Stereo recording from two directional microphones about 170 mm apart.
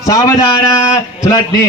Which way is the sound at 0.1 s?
20° left (ahead or behind).